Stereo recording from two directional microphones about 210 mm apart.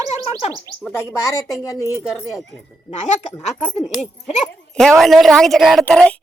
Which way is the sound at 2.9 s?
35° left (ahead or behind).